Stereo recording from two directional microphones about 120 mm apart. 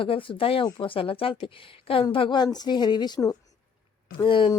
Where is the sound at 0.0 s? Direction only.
45° left (ahead or behind); by 3.3 s 30° left (ahead or behind).